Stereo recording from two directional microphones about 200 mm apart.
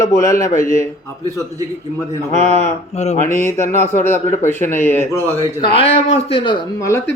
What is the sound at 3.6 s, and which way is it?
Speech, 35° right (ahead or behind).